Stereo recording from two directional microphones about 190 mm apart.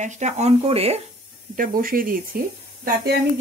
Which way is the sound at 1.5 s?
50° right (ahead or behind).